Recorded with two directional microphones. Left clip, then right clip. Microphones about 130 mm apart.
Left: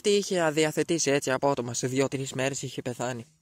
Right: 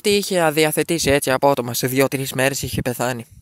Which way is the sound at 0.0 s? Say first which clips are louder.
Right 7 dB; 35° right (ahead or behind).